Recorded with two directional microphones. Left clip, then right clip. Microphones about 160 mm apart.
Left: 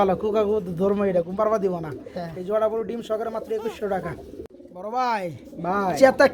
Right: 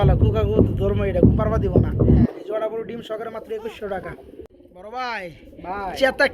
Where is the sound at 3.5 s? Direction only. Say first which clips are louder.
Left 1 dB; 20° right (ahead or behind).